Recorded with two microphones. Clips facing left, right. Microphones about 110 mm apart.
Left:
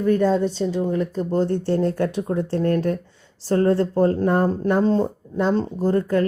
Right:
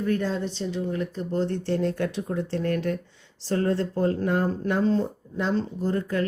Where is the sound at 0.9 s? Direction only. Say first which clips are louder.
Left 6 dB; 40° left (ahead or behind).